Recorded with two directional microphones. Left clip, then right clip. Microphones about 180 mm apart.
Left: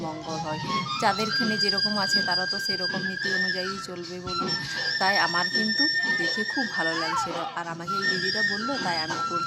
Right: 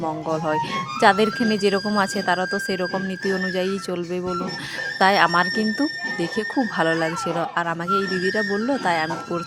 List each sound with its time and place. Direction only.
1.0 s speech: 30° right (ahead or behind)
4.9 s speech: 35° right (ahead or behind)